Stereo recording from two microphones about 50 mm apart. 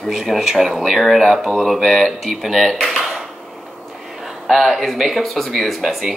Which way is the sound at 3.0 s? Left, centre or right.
Centre.